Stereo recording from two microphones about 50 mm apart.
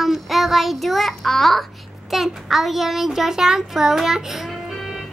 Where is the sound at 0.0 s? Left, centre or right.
Centre.